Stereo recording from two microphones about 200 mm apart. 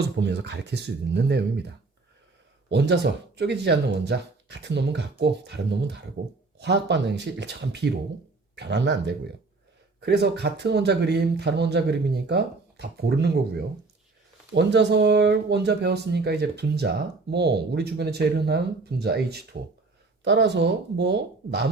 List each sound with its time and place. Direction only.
0.0 s speech: 60° right (ahead or behind)